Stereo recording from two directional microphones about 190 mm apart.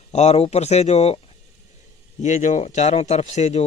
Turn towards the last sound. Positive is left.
turn(degrees=35)  # may be behind; listen again after turning